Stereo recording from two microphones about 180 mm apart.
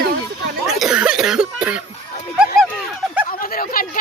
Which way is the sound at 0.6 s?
5° right (ahead or behind).